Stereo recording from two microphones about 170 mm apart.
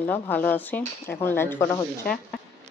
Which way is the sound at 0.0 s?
10° left (ahead or behind).